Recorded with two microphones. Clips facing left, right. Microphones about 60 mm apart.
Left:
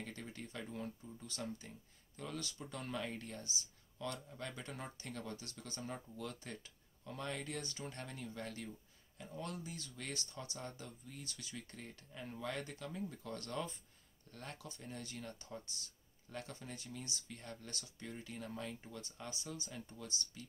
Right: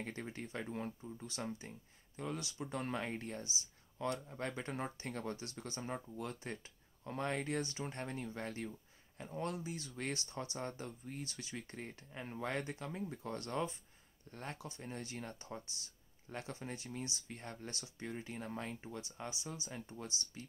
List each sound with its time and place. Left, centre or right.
0.0 s speech: right
1.0 s speech: right
19.1 s speech: right
20.4 s speech: right